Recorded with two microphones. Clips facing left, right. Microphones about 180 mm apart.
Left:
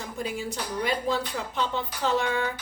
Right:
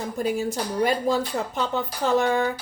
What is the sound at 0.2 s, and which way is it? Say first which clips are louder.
Speech: right 7 dB; 45° right (ahead or behind).